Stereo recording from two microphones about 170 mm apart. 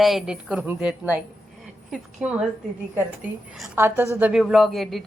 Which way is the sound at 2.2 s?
5° right (ahead or behind).